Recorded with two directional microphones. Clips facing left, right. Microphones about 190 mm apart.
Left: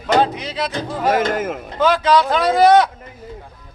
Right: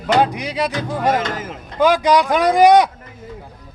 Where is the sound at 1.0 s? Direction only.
5° left (ahead or behind).